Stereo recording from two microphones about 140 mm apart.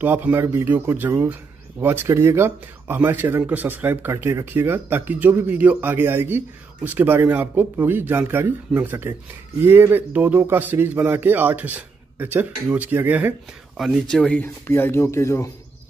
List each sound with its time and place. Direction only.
0.0 s speech: 15° right (ahead or behind)
13.7 s speech: centre (ahead or behind); by 15.5 s 20° left (ahead or behind)